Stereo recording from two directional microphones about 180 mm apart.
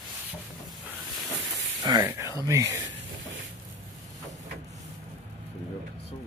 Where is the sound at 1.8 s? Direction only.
20° right (ahead or behind).